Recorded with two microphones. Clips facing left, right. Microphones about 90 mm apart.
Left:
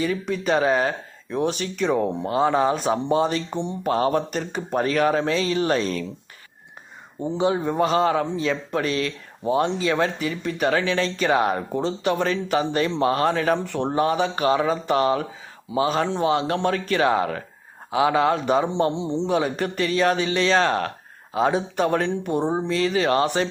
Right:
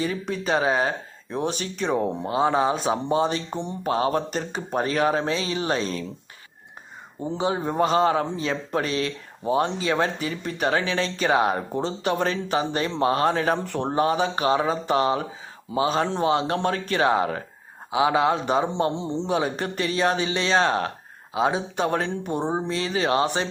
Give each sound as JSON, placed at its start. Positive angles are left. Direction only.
{"t": 0.0, "sound": "speech", "side_deg": -35}
{"t": 7.3, "sound": "speech", "side_deg": -35}